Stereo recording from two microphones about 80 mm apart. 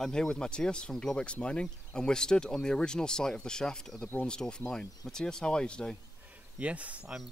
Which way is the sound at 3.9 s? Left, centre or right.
Left.